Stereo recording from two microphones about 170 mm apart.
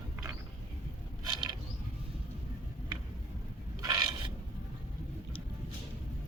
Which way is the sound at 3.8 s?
20° right (ahead or behind).